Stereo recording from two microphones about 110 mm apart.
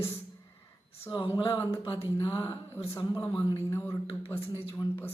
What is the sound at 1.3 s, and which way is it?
Speech, 45° left (ahead or behind).